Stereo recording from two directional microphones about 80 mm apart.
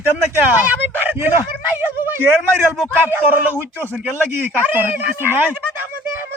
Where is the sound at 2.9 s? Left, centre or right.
Right.